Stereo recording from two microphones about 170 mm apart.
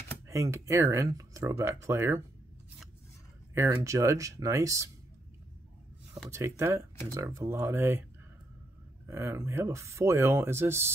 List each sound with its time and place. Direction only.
0.3 s speech: 15° right (ahead or behind)
3.5 s speech: 15° right (ahead or behind)
6.3 s speech: 15° right (ahead or behind)
9.0 s speech: 15° right (ahead or behind)